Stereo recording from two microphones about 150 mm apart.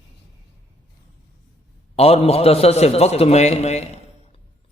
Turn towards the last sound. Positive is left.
turn(degrees=45)  # may be behind; listen again after turning